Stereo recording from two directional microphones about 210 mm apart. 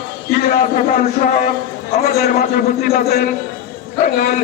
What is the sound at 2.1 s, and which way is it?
A man's voice, 45° left (ahead or behind).